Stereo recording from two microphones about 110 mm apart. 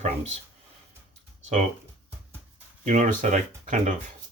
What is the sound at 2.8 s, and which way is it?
Speech, 90° right.